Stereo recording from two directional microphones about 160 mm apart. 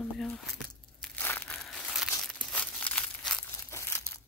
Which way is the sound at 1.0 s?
10° left (ahead or behind).